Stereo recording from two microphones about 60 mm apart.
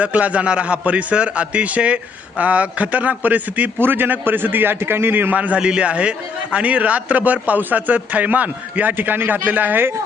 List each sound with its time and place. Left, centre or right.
0.0 s a man's voice: right
3.8 s a man's voice: right